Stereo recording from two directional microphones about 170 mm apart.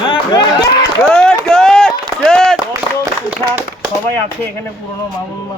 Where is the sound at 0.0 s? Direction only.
25° left (ahead or behind).